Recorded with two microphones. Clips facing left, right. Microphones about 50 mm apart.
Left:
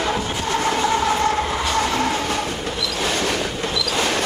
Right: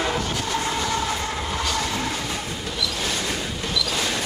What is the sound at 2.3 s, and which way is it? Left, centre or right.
Train, left.